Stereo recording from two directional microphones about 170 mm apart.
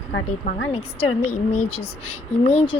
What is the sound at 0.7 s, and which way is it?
Speech, 35° left (ahead or behind).